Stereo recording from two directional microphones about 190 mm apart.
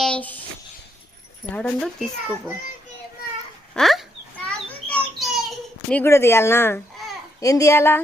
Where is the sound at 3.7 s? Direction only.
Centre (ahead or behind).